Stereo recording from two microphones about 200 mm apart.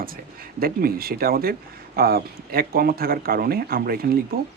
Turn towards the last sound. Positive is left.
turn(degrees=-50)  # may be behind; listen again after turning